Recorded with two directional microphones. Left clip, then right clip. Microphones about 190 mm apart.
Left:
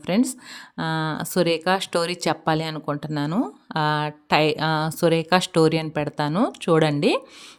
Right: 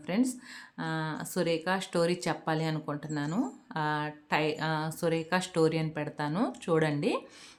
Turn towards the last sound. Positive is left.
turn(degrees=50)  # may be behind; listen again after turning